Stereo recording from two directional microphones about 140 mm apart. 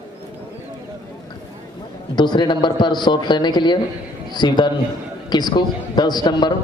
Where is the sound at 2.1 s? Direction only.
30° left (ahead or behind).